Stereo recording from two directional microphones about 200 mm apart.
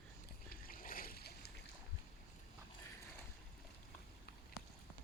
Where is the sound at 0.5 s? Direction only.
45° left (ahead or behind).